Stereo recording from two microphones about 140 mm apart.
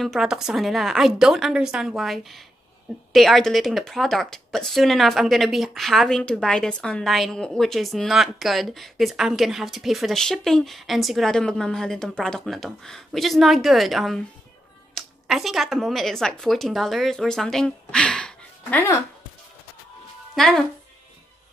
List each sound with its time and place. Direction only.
0.0 s speech: centre (ahead or behind)
18.8 s speech: 20° left (ahead or behind)
20.3 s speech: centre (ahead or behind)